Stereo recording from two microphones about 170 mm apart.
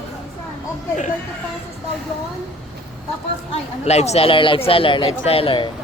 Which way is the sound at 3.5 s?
40° left (ahead or behind).